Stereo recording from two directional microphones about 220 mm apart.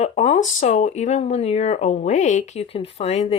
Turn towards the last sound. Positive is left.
turn(degrees=30)  # may be behind; listen again after turning